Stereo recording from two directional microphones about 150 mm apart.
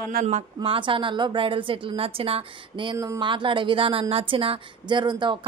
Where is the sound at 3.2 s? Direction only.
35° right (ahead or behind).